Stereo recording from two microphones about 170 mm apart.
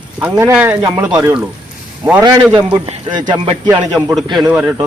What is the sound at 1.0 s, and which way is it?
Speech, 20° right (ahead or behind).